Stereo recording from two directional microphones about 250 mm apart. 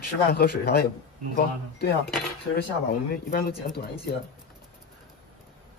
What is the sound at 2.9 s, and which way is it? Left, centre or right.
Speech, left.